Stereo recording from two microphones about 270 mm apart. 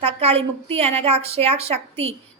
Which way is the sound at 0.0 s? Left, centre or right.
Right.